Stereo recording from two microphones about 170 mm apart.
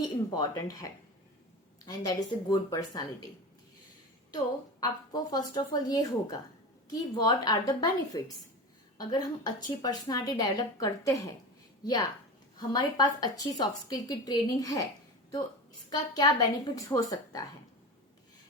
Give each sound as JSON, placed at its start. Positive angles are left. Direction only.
{"t": 0.0, "sound": "a woman's voice", "side_deg": 20}
{"t": 4.8, "sound": "a woman's voice", "side_deg": 25}
{"t": 7.3, "sound": "a woman's voice", "side_deg": 25}
{"t": 15.9, "sound": "a woman's voice", "side_deg": 25}